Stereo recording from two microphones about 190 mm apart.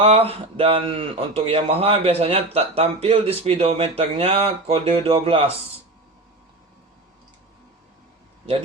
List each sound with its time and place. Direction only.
0.0 s speech: 30° right (ahead or behind)